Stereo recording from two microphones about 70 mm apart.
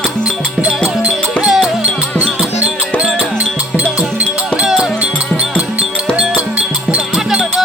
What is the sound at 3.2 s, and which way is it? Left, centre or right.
Music, centre.